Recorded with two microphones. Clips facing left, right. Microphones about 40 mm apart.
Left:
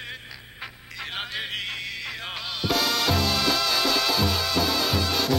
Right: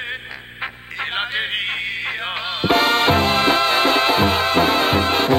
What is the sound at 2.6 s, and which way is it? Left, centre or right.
Music, right.